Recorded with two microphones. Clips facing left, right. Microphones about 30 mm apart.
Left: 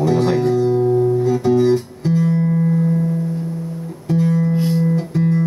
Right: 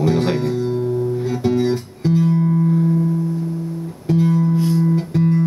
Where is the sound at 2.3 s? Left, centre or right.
Centre.